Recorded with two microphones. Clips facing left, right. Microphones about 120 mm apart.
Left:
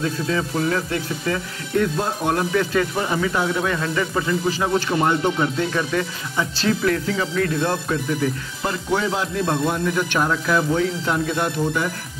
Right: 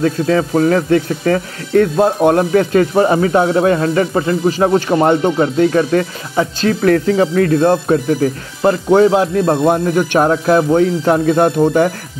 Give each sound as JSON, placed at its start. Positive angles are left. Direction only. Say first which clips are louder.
{"t": 0.0, "sound": "speech", "louder": "right 9 dB", "side_deg": -50}